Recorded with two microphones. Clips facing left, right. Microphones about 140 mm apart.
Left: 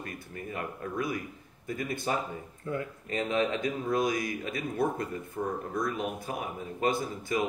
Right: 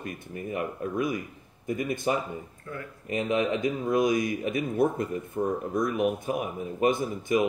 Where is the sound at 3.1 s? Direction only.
20° right (ahead or behind).